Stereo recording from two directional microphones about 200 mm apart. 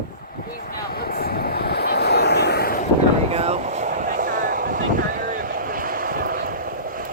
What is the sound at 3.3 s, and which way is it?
Vehicle, 30° right (ahead or behind).